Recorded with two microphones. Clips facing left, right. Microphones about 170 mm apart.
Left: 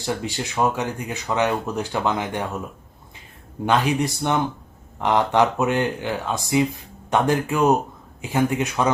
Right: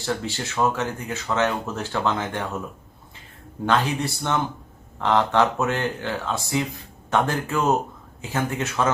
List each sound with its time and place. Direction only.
0.0 s speech: 15° left (ahead or behind)
3.7 s speech: 15° left (ahead or behind)